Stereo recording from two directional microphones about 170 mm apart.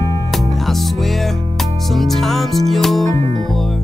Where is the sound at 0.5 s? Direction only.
Centre (ahead or behind).